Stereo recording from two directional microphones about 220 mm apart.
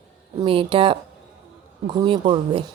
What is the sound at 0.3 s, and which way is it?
A woman's voice, 25° right (ahead or behind).